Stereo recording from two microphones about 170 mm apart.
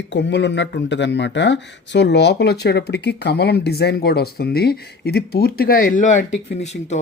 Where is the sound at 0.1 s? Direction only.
90° left.